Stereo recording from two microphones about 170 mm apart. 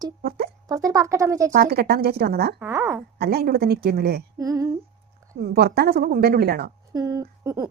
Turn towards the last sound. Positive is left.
turn(degrees=-20)  # may be behind; listen again after turning